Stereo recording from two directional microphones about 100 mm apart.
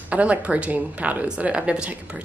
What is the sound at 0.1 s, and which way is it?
A woman's voice, 15° right (ahead or behind).